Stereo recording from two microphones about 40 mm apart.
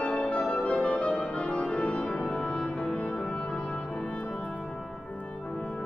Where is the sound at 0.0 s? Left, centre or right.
Left.